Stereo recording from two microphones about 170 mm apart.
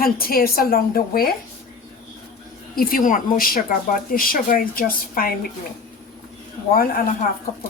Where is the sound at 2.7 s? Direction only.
60° left (ahead or behind).